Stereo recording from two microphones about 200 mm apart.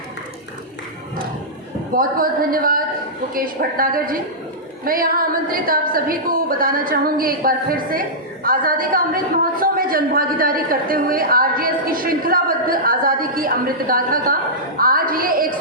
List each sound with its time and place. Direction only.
1.9 s a woman's voice: 45° right (ahead or behind)